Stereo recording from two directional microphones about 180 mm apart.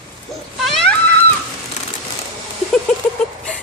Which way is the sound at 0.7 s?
5° left (ahead or behind).